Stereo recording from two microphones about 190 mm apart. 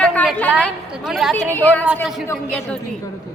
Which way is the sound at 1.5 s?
10° left (ahead or behind).